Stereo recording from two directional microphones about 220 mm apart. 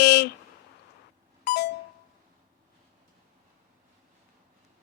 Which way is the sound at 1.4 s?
50° left (ahead or behind).